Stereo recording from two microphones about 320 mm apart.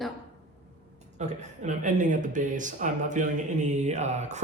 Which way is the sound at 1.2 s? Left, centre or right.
Right.